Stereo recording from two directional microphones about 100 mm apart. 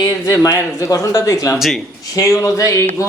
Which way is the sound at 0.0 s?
35° left (ahead or behind).